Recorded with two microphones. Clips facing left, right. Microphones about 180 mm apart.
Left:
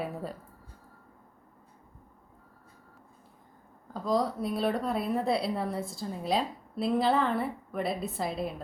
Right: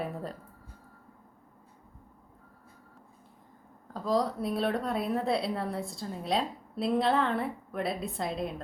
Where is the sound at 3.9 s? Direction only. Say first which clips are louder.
Even; centre (ahead or behind).